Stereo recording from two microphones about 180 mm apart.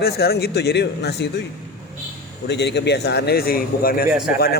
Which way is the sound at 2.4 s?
70° left (ahead or behind).